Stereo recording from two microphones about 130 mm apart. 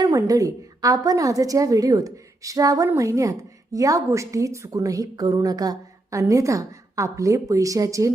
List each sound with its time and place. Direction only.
0.0 s a woman's voice: 25° right (ahead or behind)